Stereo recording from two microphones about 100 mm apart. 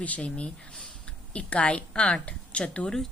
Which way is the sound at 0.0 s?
15° left (ahead or behind).